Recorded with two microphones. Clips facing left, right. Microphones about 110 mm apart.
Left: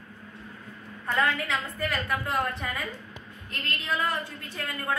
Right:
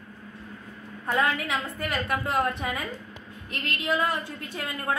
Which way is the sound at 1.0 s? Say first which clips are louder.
Right 1 dB; 15° right (ahead or behind).